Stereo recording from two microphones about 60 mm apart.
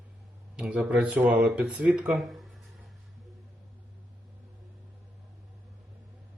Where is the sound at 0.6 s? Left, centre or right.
Centre.